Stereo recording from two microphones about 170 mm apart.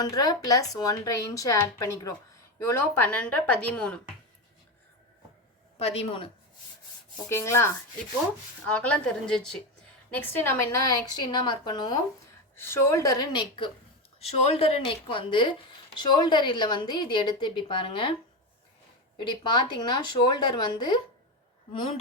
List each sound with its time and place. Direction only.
0.0 s a woman's voice: 20° left (ahead or behind); by 4.0 s 5° left (ahead or behind)
5.8 s a woman's voice: 35° left (ahead or behind)
7.3 s a woman's voice: 15° left (ahead or behind)
12.5 s a woman's voice: 15° left (ahead or behind)
14.2 s a woman's voice: 35° left (ahead or behind)
19.2 s a woman's voice: 25° left (ahead or behind)